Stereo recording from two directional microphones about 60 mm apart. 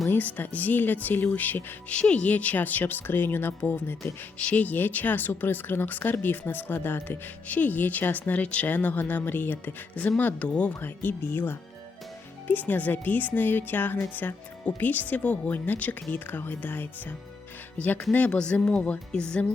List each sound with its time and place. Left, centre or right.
0.1 s speech: left
2.0 s speech: centre; by 3.9 s left
4.4 s speech: left
10.8 s speech: left
18.3 s music: centre